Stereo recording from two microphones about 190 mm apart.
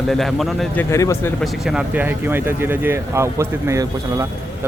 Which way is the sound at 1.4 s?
5° right (ahead or behind).